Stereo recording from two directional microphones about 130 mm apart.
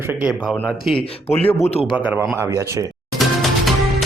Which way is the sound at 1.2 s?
50° left (ahead or behind).